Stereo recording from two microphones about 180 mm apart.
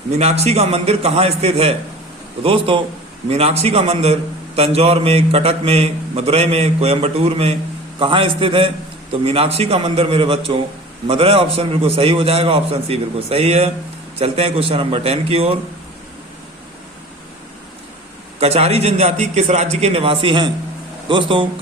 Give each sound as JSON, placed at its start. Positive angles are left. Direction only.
{"t": 0.2, "sound": "a man's voice", "side_deg": -35}
{"t": 18.3, "sound": "a man's voice", "side_deg": -35}